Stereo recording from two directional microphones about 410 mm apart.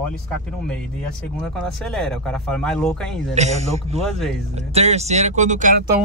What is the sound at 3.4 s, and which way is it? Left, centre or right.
Speech, centre.